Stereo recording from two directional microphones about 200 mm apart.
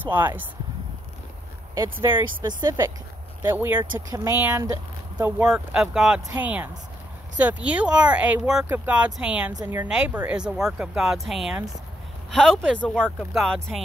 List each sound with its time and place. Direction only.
0.0 s speech: 10° right (ahead or behind)
1.8 s speech: 15° right (ahead or behind)
5.5 s speech: 5° right (ahead or behind)
9.5 s speech: 20° right (ahead or behind)
9.8 s speech: 5° right (ahead or behind)